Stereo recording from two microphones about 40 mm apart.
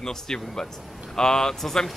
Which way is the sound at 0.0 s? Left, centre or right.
Centre.